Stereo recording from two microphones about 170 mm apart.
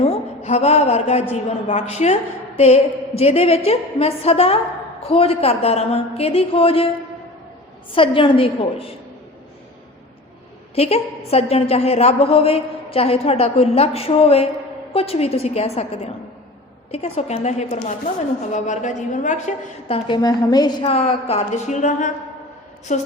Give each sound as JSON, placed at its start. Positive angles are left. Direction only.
{"t": 0.0, "sound": "a man's voice", "side_deg": 40}
{"t": 7.9, "sound": "a woman's voice", "side_deg": 30}
{"t": 10.8, "sound": "a woman's voice", "side_deg": 35}
{"t": 20.1, "sound": "a woman's voice", "side_deg": 25}
{"t": 20.8, "sound": "a woman's voice", "side_deg": 35}